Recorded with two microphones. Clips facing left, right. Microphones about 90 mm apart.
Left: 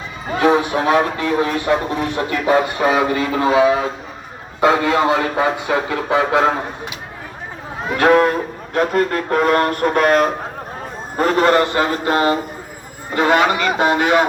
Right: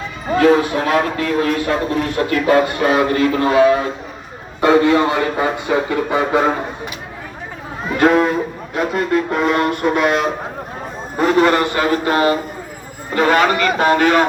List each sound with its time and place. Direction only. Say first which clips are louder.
0.3 s speech: right 2 dB; 20° left (ahead or behind)
7.9 s a man's voice: left 1 dB; 75° left (ahead or behind); by 14.3 s 15° left (ahead or behind)